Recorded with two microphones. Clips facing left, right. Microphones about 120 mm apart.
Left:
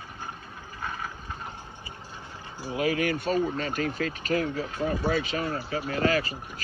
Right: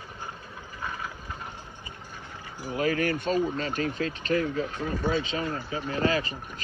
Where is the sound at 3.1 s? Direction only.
25° right (ahead or behind).